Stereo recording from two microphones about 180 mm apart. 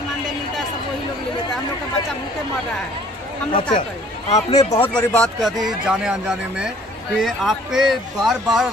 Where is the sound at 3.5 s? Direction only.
30° left (ahead or behind).